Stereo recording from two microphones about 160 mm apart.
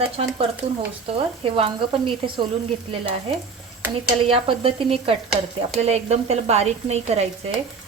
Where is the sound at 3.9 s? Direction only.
35° right (ahead or behind).